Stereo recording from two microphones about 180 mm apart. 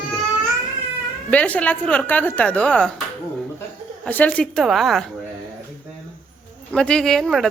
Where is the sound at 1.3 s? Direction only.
5° left (ahead or behind).